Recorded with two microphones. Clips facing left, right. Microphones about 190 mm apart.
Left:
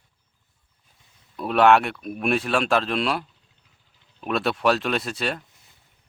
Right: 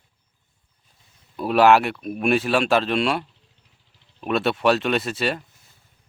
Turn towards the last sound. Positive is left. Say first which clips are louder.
# right 3 dB
turn(degrees=0)  # may be behind; listen again after turning